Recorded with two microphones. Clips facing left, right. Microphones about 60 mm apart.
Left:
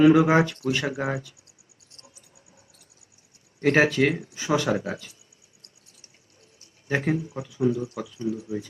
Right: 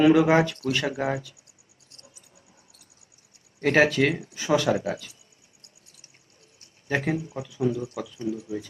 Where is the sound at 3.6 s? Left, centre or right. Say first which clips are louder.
Even; left.